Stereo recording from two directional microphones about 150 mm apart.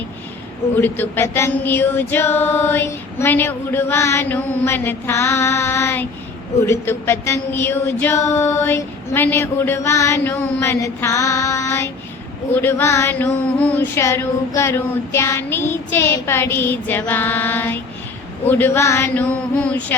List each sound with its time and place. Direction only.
0.8 s female singing: 15° left (ahead or behind)